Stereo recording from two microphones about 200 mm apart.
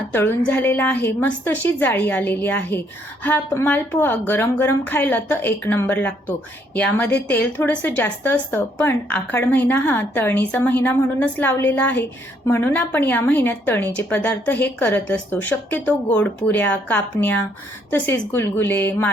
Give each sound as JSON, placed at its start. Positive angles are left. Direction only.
{"t": 0.1, "sound": "a woman's voice", "side_deg": 10}